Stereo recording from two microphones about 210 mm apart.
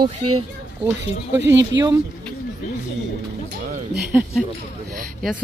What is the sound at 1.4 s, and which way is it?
Speech, 60° right (ahead or behind).